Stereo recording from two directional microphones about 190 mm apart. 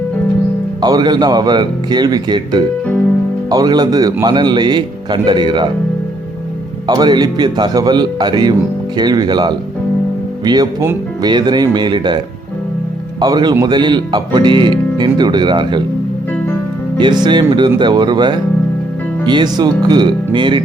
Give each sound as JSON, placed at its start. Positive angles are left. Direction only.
{"t": 0.8, "sound": "speech", "side_deg": -20}
{"t": 6.8, "sound": "speech", "side_deg": -20}
{"t": 17.2, "sound": "speech", "side_deg": -25}